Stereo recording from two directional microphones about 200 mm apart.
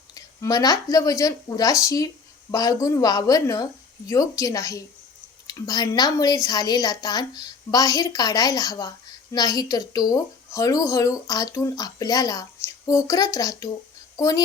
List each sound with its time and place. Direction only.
0.1 s a woman's voice: 20° left (ahead or behind)